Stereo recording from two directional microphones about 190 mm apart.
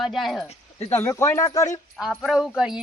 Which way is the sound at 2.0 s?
Centre (ahead or behind).